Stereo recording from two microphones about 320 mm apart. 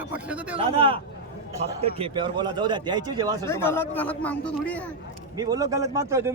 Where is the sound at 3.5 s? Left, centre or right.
Centre.